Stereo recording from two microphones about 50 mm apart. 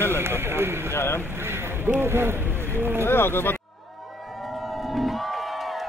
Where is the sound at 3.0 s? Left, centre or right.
Left.